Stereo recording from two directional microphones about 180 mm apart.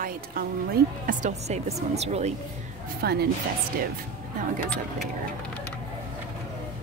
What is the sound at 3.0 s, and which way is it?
Speech, 60° right (ahead or behind).